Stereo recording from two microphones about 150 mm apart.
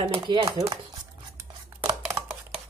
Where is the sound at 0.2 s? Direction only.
30° right (ahead or behind).